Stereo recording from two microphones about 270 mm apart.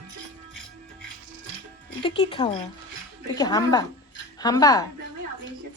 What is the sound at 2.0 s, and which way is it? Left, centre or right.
Speech, centre.